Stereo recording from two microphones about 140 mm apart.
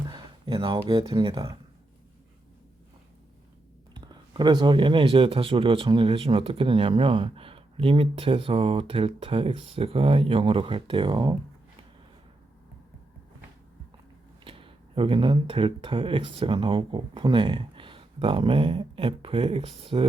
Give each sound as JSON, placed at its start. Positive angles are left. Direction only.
{"t": 0.1, "sound": "a sound", "side_deg": -30}
{"t": 0.9, "sound": "speech", "side_deg": -35}
{"t": 4.0, "sound": "speech", "side_deg": -30}
{"t": 14.4, "sound": "speech", "side_deg": -40}